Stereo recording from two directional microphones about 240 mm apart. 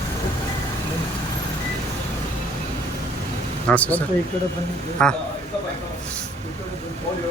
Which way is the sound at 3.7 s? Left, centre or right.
Centre.